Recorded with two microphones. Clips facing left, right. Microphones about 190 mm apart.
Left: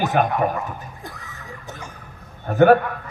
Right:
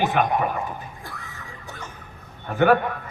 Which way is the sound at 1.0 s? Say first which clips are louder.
Left 2 dB; 20° left (ahead or behind).